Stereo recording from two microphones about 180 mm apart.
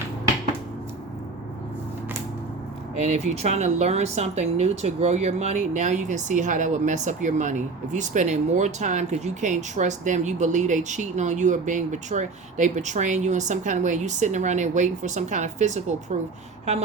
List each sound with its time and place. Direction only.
2.9 s speech: 40° right (ahead or behind)